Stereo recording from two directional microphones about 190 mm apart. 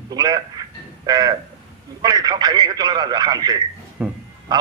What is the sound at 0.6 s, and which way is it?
Music, 20° right (ahead or behind).